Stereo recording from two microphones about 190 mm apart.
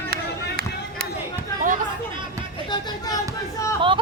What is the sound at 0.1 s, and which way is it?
Run, 50° right (ahead or behind).